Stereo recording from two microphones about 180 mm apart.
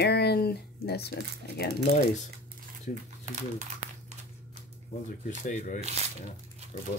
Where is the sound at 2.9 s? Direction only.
40° right (ahead or behind).